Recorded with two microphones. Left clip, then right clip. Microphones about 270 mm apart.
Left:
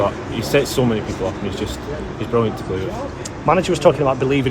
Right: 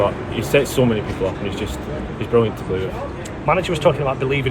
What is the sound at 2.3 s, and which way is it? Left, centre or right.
Speech, centre.